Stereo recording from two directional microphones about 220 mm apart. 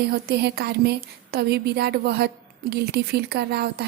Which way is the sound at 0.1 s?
45° right (ahead or behind).